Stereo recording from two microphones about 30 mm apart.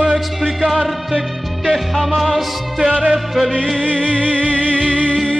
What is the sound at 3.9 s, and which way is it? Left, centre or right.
Music, left.